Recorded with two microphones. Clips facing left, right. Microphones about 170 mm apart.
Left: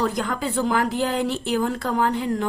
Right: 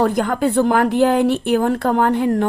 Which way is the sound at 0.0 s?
55° right (ahead or behind).